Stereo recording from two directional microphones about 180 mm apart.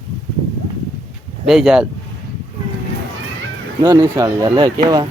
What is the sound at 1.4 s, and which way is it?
Speech, 5° right (ahead or behind).